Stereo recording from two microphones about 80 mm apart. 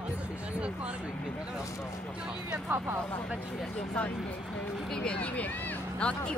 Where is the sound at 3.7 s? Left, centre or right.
Centre.